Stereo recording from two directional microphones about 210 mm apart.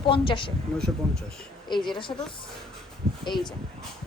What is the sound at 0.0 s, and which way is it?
Speech, 25° left (ahead or behind).